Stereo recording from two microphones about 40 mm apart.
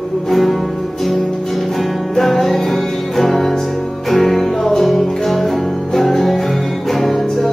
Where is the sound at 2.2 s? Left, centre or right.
Centre.